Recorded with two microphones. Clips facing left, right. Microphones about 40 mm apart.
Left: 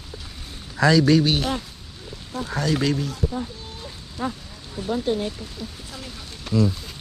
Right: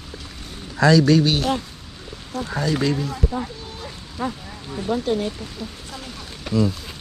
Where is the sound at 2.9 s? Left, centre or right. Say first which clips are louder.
Right 2 dB; right.